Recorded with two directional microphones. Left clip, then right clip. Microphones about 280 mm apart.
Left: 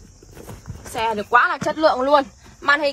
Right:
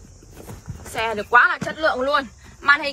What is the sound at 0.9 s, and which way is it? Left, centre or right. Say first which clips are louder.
Speech: even; centre.